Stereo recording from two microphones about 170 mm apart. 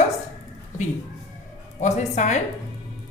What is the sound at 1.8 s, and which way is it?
Speech, 45° left (ahead or behind).